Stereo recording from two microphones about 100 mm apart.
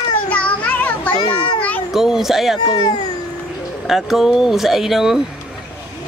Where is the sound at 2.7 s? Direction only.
40° left (ahead or behind).